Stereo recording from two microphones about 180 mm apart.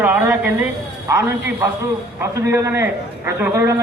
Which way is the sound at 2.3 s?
15° right (ahead or behind).